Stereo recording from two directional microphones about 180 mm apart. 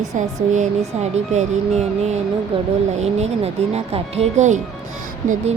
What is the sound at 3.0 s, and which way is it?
Speech, 35° right (ahead or behind).